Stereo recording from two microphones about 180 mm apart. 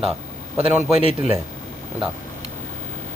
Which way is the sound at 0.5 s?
10° right (ahead or behind).